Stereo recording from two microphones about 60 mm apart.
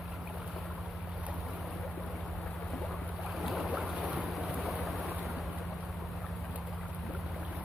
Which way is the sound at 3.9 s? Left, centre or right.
Right.